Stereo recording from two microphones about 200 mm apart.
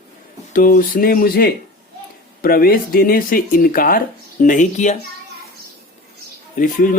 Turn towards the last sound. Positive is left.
turn(degrees=45)  # may be behind; listen again after turning